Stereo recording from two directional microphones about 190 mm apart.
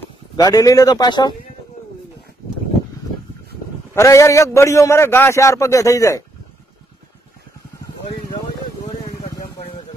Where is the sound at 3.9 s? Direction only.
15° left (ahead or behind).